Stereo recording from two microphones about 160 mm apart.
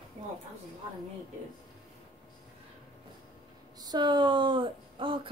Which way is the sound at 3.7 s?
25° right (ahead or behind).